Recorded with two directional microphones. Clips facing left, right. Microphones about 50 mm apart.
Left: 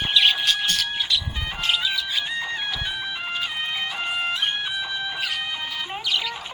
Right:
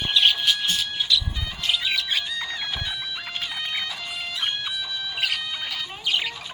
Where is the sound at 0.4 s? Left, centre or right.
Left.